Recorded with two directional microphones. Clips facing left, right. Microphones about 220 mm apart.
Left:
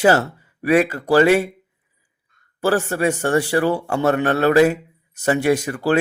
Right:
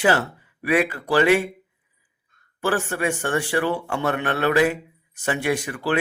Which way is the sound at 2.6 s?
40° left (ahead or behind).